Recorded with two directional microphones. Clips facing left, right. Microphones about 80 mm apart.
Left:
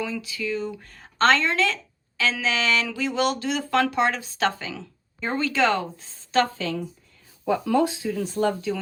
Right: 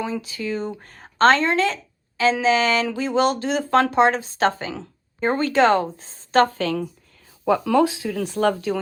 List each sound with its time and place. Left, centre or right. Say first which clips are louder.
0.0 s speech: right 2 dB; right
7.4 s speech: right 4 dB; right